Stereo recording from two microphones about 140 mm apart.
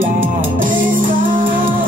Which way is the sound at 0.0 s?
80° right.